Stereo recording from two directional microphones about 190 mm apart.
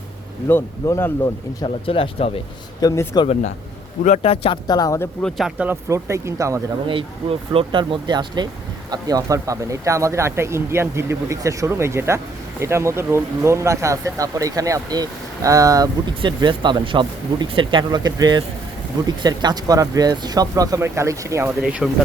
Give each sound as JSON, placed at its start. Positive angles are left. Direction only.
{"t": 0.4, "sound": "speech", "side_deg": 10}
{"t": 1.6, "sound": "speech", "side_deg": 30}
{"t": 2.8, "sound": "speech", "side_deg": 15}
{"t": 4.0, "sound": "speech", "side_deg": 35}
{"t": 5.2, "sound": "speech", "side_deg": -5}
{"t": 6.8, "sound": "speech", "side_deg": -30}